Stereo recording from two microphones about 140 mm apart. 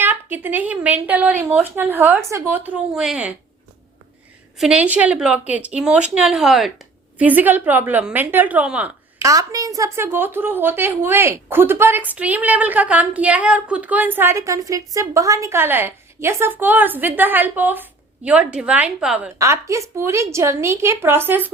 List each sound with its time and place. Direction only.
0.0 s a woman's voice: 15° right (ahead or behind)
4.6 s a woman's voice: 10° right (ahead or behind)
9.1 s a woman's voice: 25° right (ahead or behind); by 19.3 s 5° right (ahead or behind)
19.4 s a woman's voice: 20° right (ahead or behind)